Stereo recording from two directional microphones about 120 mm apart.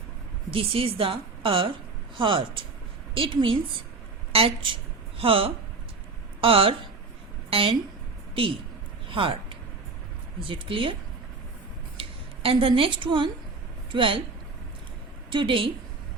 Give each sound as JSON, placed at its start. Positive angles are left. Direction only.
{"t": 0.5, "sound": "a woman's voice", "side_deg": -50}
{"t": 9.0, "sound": "a sound", "side_deg": -45}
{"t": 10.5, "sound": "a woman's voice", "side_deg": -45}
{"t": 11.9, "sound": "a woman's voice", "side_deg": -50}
{"t": 15.3, "sound": "a woman's voice", "side_deg": -45}